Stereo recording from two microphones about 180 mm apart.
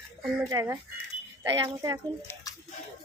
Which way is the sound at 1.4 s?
20° right (ahead or behind).